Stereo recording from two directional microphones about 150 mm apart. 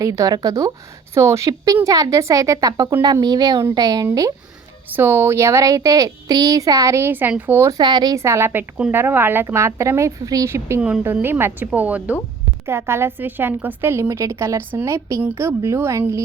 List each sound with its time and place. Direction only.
0.0 s speech: 20° right (ahead or behind)
10.8 s a woman's voice: 5° right (ahead or behind)